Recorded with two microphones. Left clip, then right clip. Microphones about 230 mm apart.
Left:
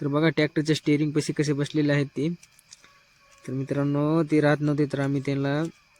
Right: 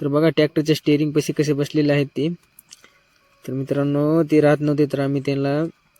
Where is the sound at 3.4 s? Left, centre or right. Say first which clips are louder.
Right 6 dB; centre.